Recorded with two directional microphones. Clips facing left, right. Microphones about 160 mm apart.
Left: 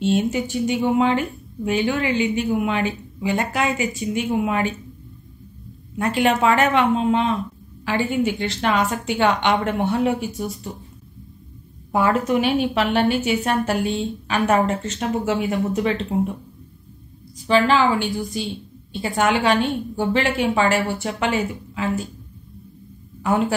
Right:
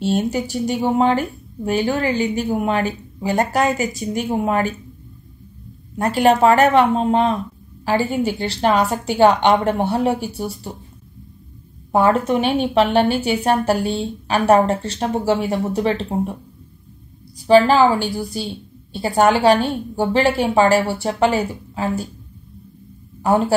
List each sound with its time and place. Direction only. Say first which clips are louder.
0.0 s speech: even; 40° right (ahead or behind)
5.9 s speech: right 4 dB; 40° right (ahead or behind)
11.9 s speech: right 3 dB; 30° right (ahead or behind)
17.5 s speech: right 5 dB; 40° right (ahead or behind)
23.2 s speech: right 3 dB; 35° right (ahead or behind)